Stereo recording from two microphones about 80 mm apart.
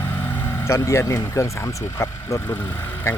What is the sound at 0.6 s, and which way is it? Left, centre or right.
Speech, left.